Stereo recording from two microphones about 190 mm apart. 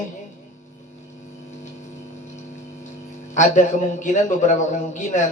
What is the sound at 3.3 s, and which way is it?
A man's voice, 40° left (ahead or behind).